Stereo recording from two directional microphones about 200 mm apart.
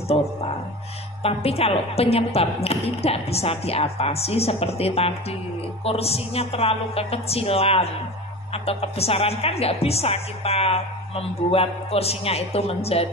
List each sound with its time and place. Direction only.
1.2 s speech: 30° left (ahead or behind)